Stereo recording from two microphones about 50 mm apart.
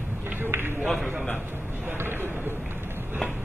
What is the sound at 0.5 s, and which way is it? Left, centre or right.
Run, right.